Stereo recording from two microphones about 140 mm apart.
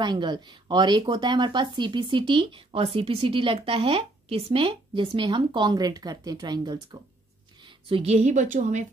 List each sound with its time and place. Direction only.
0.0 s speech: 30° right (ahead or behind)
7.6 s speech: 45° right (ahead or behind)